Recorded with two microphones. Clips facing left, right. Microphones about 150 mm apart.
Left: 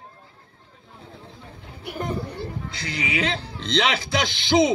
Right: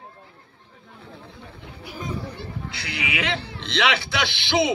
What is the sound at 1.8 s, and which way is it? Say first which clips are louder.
Children playing: left 4 dB; 60° left (ahead or behind).